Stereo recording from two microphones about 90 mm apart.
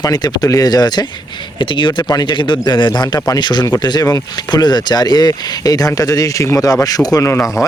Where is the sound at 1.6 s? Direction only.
60° left (ahead or behind).